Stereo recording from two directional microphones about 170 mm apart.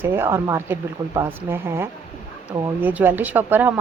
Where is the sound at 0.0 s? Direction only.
15° right (ahead or behind).